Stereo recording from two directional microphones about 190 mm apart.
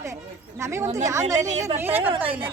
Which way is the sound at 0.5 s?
15° right (ahead or behind).